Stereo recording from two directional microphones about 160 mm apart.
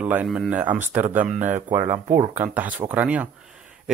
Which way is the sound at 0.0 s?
10° right (ahead or behind).